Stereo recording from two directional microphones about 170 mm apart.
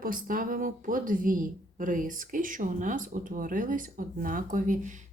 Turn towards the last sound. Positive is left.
turn(degrees=-50)  # may be behind; listen again after turning